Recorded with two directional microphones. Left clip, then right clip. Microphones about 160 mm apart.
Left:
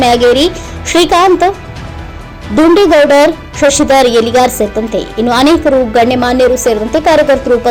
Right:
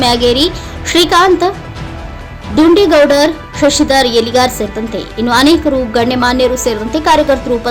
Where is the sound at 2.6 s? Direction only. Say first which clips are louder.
Left 1 dB; 5° left (ahead or behind).